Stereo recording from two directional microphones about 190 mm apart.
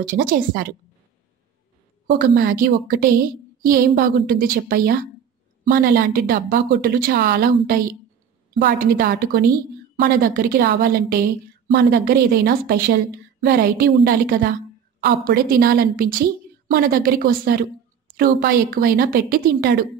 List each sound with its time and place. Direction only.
0.0 s a woman's voice: 50° right (ahead or behind)
2.0 s a woman's voice: 50° right (ahead or behind)